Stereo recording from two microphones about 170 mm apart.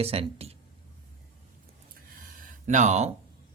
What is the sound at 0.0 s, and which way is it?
Speech, 35° right (ahead or behind).